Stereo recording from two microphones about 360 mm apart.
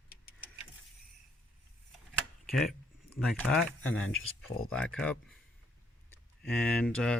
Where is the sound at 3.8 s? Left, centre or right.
Left.